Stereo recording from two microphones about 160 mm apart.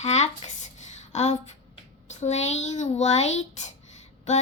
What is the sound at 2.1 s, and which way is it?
Female singing, 45° left (ahead or behind).